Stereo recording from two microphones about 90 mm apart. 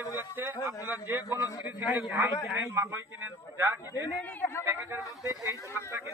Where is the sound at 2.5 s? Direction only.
25° right (ahead or behind).